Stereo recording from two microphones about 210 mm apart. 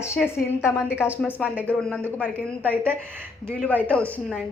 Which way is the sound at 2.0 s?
10° right (ahead or behind).